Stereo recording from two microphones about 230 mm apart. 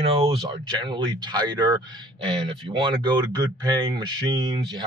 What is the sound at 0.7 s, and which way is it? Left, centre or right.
Speech, centre.